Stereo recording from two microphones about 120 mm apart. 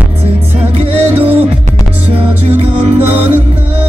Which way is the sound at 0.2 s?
55° right (ahead or behind).